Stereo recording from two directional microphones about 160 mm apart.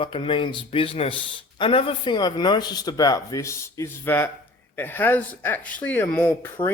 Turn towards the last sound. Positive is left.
turn(degrees=15)  # may be behind; listen again after turning